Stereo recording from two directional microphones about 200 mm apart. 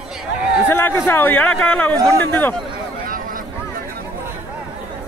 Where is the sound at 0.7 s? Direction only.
10° left (ahead or behind).